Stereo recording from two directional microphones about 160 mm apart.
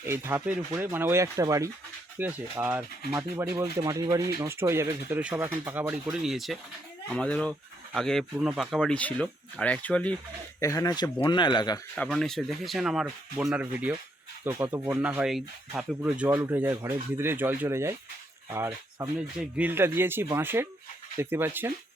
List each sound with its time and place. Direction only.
0.0 s speech: 15° right (ahead or behind)
6.1 s speech: centre (ahead or behind)
10.6 s speech: 20° left (ahead or behind)
11.9 s speech: 5° left (ahead or behind); by 21.7 s 15° right (ahead or behind)